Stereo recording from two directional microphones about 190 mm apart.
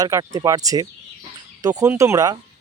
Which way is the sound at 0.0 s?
20° right (ahead or behind).